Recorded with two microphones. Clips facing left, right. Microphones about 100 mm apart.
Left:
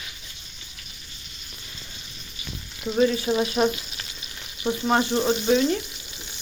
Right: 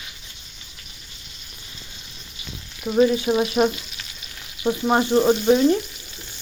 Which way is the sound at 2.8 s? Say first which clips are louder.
Right 3 dB; 20° right (ahead or behind).